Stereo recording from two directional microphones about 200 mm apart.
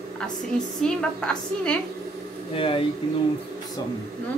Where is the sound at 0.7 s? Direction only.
5° left (ahead or behind).